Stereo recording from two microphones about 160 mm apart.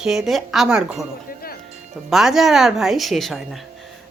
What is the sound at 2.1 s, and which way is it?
Speech, centre (ahead or behind).